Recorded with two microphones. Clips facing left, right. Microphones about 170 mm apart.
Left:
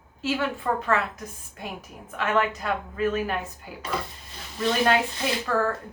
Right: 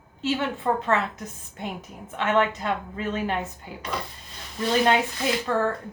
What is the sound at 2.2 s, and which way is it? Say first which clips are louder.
A woman's voice: right 2 dB; 25° right (ahead or behind).